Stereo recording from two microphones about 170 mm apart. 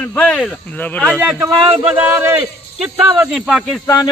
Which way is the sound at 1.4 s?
10° right (ahead or behind).